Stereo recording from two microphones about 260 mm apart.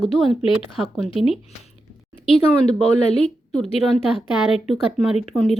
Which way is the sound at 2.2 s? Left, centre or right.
Left.